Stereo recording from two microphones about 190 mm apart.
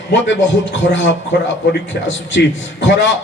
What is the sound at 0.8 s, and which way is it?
Speech, 80° left.